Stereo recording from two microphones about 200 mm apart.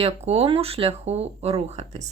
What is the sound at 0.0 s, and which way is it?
Speech, 30° right (ahead or behind).